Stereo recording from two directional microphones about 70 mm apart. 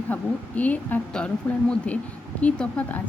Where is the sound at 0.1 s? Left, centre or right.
Left.